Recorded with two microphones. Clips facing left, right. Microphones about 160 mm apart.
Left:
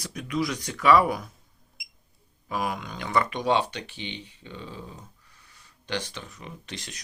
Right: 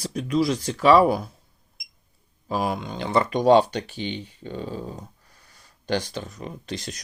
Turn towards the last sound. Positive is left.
turn(degrees=-35)  # may be behind; listen again after turning